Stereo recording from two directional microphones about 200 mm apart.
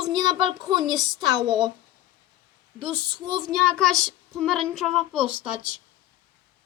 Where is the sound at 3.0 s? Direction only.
25° right (ahead or behind).